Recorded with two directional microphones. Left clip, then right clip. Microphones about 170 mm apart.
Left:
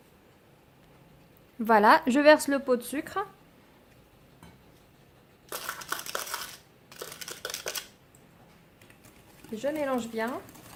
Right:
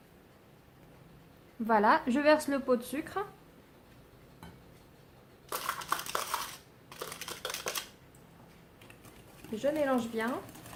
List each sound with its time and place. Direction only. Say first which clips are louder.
1.6 s a woman's voice: left 6 dB; 60° left (ahead or behind)
5.5 s a sound: right 1 dB; 10° left (ahead or behind)
9.6 s speech: even; 40° left (ahead or behind)